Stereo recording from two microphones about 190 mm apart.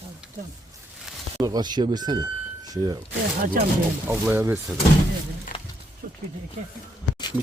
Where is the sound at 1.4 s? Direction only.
20° right (ahead or behind).